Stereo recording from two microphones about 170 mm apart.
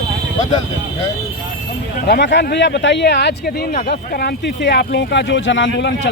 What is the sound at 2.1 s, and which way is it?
Speech, 85° left.